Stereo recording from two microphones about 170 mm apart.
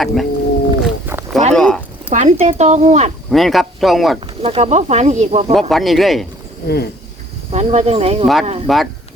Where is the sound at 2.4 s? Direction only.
40° right (ahead or behind).